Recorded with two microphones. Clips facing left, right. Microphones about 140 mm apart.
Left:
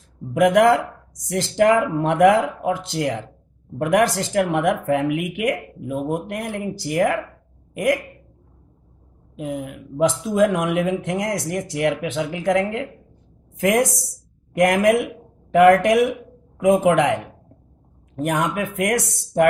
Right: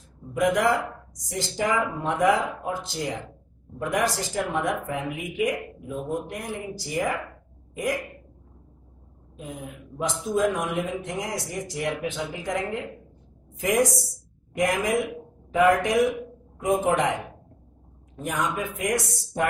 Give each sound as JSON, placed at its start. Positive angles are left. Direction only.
{"t": 0.3, "sound": "speech", "side_deg": 75}
{"t": 9.4, "sound": "speech", "side_deg": 75}
{"t": 16.5, "sound": "speech", "side_deg": 80}
{"t": 18.1, "sound": "speech", "side_deg": 65}